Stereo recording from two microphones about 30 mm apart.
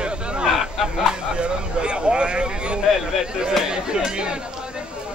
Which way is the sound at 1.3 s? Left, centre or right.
Right.